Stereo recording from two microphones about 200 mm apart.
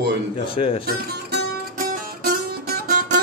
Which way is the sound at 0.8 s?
50° right (ahead or behind).